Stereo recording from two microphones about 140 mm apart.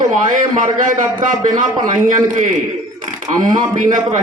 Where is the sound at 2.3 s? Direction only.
65° right (ahead or behind).